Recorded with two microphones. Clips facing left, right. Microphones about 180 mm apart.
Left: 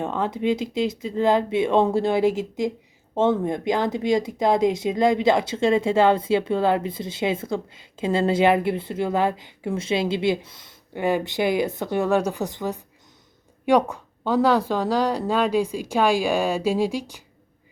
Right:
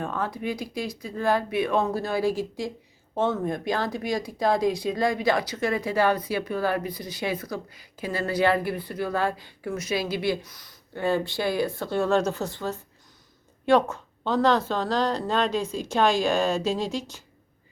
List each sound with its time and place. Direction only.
0.0 s speech: 20° left (ahead or behind)